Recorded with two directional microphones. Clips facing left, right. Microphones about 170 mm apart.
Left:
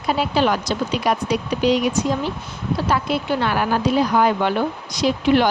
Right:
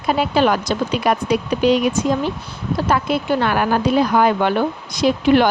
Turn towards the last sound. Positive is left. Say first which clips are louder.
# right 3 dB
turn(degrees=-55)  # may be behind; listen again after turning